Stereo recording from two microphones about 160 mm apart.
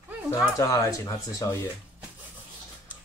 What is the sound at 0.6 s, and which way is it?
Speech, 20° left (ahead or behind).